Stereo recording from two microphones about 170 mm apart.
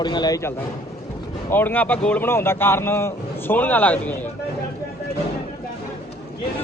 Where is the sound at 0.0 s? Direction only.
25° left (ahead or behind); by 4.3 s 10° left (ahead or behind).